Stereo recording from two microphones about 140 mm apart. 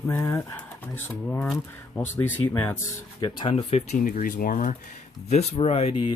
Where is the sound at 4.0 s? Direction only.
75° left (ahead or behind).